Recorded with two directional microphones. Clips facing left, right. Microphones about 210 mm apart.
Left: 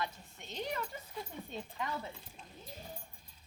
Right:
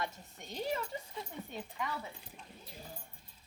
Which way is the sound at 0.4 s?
10° right (ahead or behind).